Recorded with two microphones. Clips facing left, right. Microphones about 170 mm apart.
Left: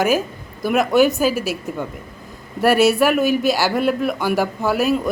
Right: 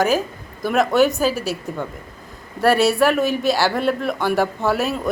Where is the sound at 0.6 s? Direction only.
5° left (ahead or behind).